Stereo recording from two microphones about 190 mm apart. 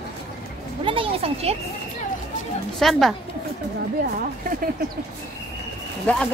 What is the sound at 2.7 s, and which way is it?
Speech, centre (ahead or behind).